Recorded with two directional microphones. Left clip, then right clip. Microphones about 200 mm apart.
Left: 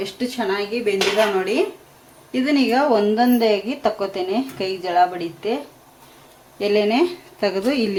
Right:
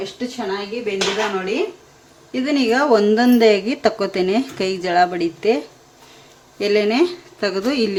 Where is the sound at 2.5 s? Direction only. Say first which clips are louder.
Right 2 dB; 10° right (ahead or behind); by 5.6 s 35° right (ahead or behind).